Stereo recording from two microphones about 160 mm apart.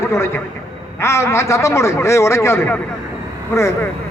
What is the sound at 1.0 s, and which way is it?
A man's voice, 15° left (ahead or behind).